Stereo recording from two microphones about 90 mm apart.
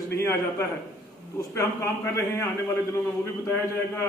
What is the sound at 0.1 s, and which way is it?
A man's voice, 30° left (ahead or behind).